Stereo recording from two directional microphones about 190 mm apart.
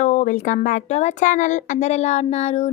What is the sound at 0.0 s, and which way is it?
Speech, 40° left (ahead or behind).